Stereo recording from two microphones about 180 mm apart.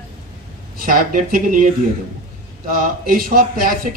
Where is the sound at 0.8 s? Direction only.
50° right (ahead or behind).